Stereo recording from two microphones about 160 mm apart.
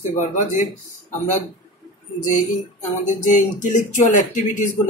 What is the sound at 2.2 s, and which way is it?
A man's voice, 55° left (ahead or behind).